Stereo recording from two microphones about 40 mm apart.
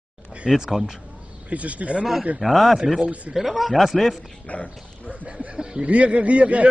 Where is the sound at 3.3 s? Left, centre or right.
Centre.